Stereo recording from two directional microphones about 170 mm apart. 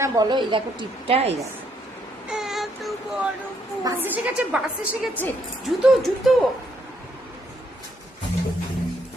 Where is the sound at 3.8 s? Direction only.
10° right (ahead or behind).